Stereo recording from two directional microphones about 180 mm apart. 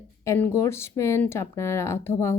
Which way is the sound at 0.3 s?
15° left (ahead or behind).